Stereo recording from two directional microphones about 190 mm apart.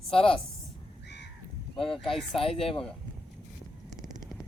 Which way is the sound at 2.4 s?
30° left (ahead or behind).